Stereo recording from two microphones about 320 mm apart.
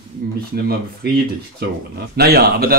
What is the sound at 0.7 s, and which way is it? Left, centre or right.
Speech, right.